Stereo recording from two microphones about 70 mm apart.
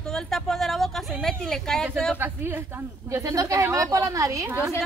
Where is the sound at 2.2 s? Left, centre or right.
Right.